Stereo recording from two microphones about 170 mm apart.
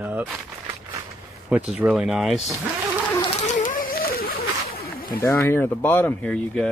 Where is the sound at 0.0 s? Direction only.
10° right (ahead or behind).